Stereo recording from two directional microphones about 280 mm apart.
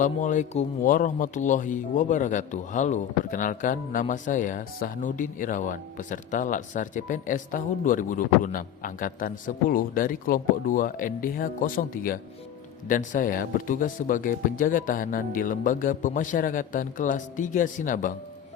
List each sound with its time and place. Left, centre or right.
0.0 s speech: left